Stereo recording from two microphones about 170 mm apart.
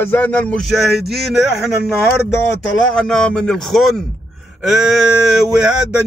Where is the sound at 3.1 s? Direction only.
5° left (ahead or behind).